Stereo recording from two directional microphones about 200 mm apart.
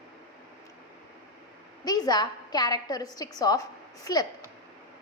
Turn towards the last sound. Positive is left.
turn(degrees=15)  # may be behind; listen again after turning